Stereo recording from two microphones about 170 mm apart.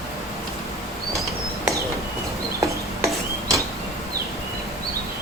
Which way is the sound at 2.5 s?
20° right (ahead or behind).